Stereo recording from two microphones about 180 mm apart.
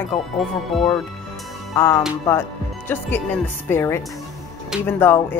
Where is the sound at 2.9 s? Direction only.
10° left (ahead or behind).